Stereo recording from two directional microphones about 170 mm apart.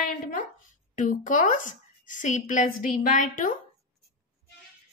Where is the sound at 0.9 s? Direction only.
50° left (ahead or behind).